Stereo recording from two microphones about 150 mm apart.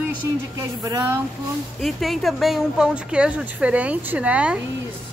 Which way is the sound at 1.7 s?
Centre (ahead or behind).